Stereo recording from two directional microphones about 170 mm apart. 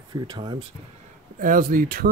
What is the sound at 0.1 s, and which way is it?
Speech, 25° right (ahead or behind).